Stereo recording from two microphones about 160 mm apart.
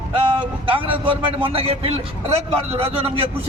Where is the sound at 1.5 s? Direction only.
35° right (ahead or behind).